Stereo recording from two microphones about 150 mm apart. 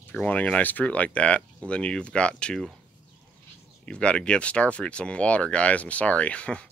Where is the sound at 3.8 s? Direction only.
5° left (ahead or behind).